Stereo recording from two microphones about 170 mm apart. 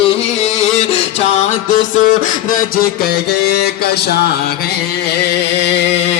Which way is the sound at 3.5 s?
70° left (ahead or behind).